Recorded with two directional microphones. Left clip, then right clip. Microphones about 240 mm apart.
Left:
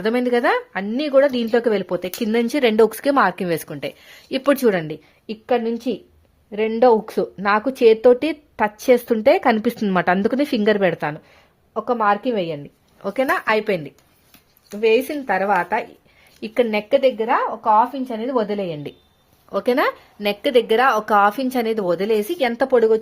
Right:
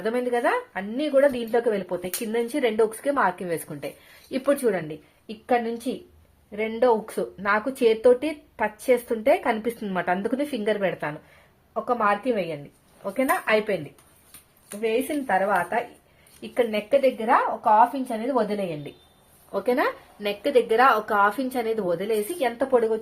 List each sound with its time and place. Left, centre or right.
0.0 s speech: left
14.8 s speech: left